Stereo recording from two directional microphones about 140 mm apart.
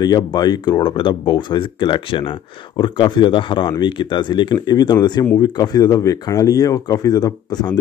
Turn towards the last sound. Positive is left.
turn(degrees=30)  # may be behind; listen again after turning